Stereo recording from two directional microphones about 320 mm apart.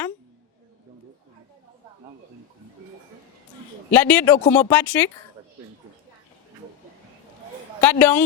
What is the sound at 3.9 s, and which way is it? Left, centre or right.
A woman's voice, centre.